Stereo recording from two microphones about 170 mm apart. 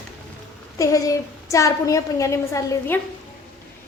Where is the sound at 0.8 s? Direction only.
20° left (ahead or behind).